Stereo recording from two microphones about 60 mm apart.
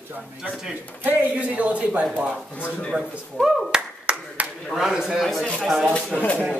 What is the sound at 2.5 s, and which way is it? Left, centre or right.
Speech, left.